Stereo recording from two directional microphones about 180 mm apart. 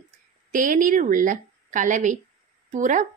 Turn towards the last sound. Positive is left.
turn(degrees=-45)  # may be behind; listen again after turning